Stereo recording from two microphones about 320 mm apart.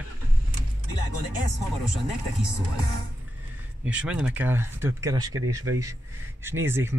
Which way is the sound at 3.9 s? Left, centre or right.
Centre.